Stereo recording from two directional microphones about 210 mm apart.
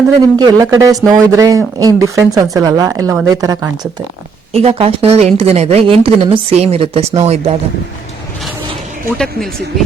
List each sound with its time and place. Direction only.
0.3 s speech: 15° right (ahead or behind)
4.5 s speech: 30° right (ahead or behind)
9.1 s speech: 5° left (ahead or behind)